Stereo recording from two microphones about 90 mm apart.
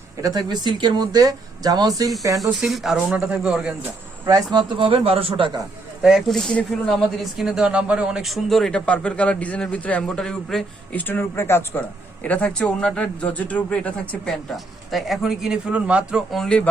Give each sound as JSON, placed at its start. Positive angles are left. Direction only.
{"t": 0.2, "sound": "speech", "side_deg": -45}
{"t": 2.4, "sound": "speech", "side_deg": 0}
{"t": 4.5, "sound": "speech", "side_deg": -80}
{"t": 6.0, "sound": "speech", "side_deg": -5}
{"t": 6.2, "sound": "speech", "side_deg": 5}
{"t": 10.9, "sound": "speech", "side_deg": 20}
{"t": 11.8, "sound": "a man's voice", "side_deg": 15}
{"t": 14.3, "sound": "speech", "side_deg": 0}
{"t": 16.3, "sound": "a man's voice", "side_deg": 10}